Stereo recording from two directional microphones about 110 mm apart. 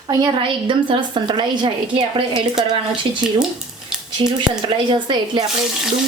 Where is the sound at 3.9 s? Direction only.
5° right (ahead or behind).